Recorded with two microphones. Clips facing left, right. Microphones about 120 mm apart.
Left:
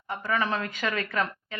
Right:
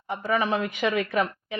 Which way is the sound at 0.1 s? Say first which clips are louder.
Right 3 dB; 15° right (ahead or behind).